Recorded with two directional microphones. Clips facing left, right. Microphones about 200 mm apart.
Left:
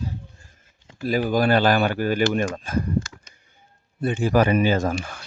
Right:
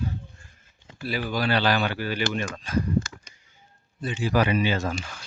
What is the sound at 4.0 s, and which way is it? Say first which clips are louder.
Speech: left 5 dB; 50° left (ahead or behind).